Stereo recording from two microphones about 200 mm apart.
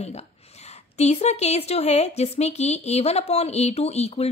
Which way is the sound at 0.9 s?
35° left (ahead or behind).